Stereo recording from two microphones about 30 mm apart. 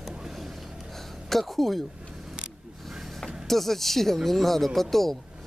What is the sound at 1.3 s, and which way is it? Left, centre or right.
Speech, centre.